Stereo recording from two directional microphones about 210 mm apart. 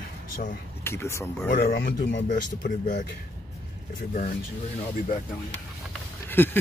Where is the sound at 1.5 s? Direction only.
45° left (ahead or behind).